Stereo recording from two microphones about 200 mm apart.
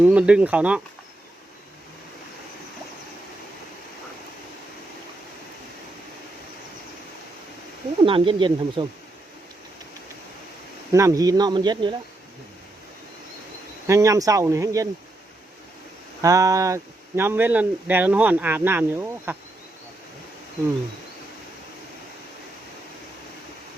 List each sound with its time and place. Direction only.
0.0 s speech: 5° right (ahead or behind)
8.0 s speech: 25° right (ahead or behind)
10.9 s speech: 15° right (ahead or behind)
13.8 s speech: 15° right (ahead or behind)
16.2 s speech: 15° right (ahead or behind)